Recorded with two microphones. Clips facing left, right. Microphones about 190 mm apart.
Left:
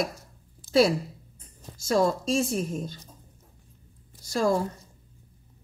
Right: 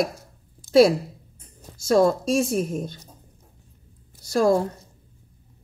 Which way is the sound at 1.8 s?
45° right (ahead or behind).